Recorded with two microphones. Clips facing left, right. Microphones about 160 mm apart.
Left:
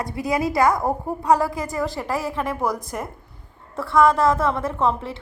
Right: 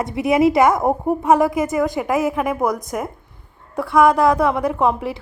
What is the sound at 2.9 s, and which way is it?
Speech, 5° right (ahead or behind).